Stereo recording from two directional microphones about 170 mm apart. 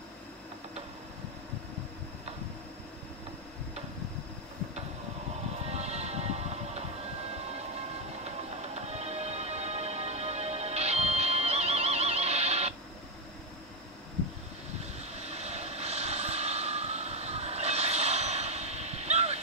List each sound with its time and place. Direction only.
5.7 s music: 40° right (ahead or behind)
14.8 s vehicle: 40° right (ahead or behind)